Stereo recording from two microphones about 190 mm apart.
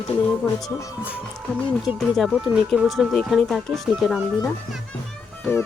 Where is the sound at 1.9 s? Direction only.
Centre (ahead or behind).